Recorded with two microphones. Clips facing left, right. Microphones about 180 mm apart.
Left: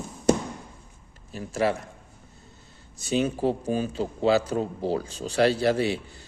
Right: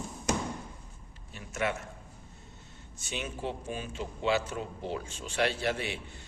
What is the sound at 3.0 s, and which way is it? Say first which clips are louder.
Speech: left 12 dB; 35° left (ahead or behind).